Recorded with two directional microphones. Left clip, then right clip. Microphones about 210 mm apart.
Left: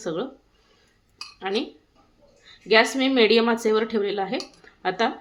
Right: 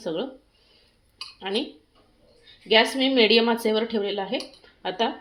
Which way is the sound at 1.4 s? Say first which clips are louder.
Left 1 dB; 10° left (ahead or behind).